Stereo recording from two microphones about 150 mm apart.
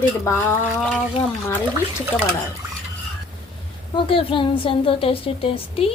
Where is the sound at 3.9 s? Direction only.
35° left (ahead or behind).